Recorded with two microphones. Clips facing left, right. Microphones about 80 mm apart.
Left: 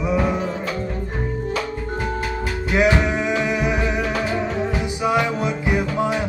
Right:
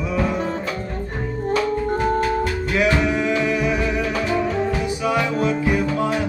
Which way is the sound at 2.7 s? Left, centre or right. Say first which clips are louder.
Left 1 dB; left.